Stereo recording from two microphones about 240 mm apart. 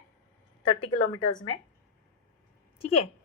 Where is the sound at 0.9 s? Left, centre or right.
Left.